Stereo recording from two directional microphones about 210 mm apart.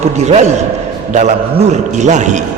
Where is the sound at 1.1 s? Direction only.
35° right (ahead or behind).